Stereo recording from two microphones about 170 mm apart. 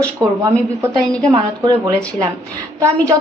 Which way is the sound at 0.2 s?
20° right (ahead or behind).